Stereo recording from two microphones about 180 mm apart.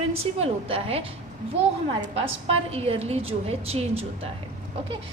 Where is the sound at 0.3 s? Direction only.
35° right (ahead or behind).